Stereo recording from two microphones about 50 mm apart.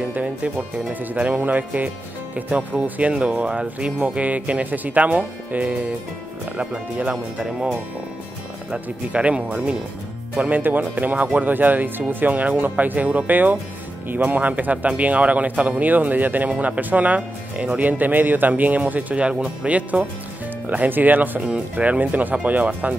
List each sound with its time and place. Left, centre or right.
0.1 s speech: right
8.6 s speech: right
10.5 s speech: right
21.4 s speech: right